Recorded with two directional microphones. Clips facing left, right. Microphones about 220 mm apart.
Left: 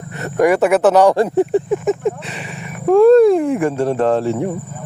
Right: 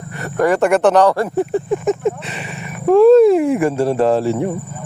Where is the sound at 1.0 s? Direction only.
20° left (ahead or behind).